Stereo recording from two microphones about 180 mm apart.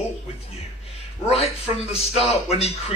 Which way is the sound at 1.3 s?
35° left (ahead or behind).